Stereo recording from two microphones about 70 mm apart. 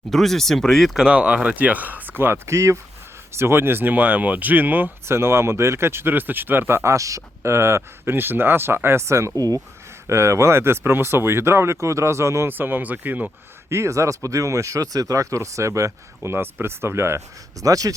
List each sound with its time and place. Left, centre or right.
0.1 s speech: centre
0.9 s speech: centre; by 2.4 s right
2.5 s speech: right
12.5 s speech: right
13.7 s speech: right
16.3 s speech: right
17.6 s speech: right